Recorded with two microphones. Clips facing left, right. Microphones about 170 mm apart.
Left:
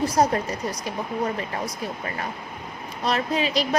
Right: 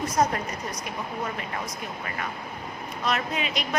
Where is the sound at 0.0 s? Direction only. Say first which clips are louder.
Left 3 dB; 30° left (ahead or behind).